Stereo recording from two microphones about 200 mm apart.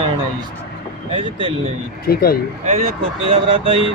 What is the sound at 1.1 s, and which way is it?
Speech, 25° right (ahead or behind).